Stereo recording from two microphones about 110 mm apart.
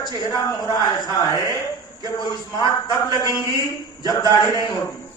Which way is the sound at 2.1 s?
40° left (ahead or behind).